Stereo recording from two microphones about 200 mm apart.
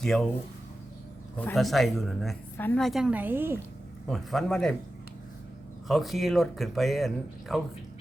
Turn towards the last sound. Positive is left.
turn(degrees=0)  # may be behind; listen again after turning